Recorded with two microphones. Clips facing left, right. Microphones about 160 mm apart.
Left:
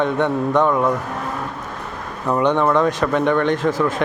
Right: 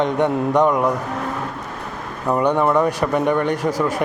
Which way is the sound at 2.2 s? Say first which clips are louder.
Even; 10° right (ahead or behind).